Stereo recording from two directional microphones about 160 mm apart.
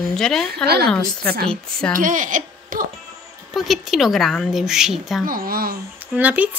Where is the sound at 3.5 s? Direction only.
Centre (ahead or behind).